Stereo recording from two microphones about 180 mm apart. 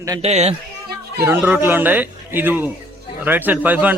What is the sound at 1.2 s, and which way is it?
A man's voice, 10° right (ahead or behind).